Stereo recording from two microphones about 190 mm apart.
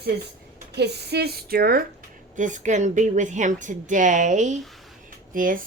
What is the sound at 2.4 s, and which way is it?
A woman's voice, 40° right (ahead or behind).